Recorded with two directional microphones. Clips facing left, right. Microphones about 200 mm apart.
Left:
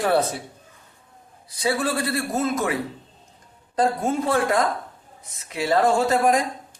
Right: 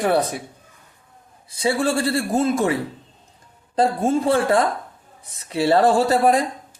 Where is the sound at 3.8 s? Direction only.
30° right (ahead or behind).